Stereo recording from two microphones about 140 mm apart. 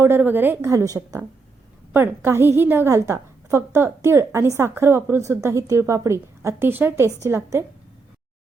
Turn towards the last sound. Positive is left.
turn(degrees=-20)  # may be behind; listen again after turning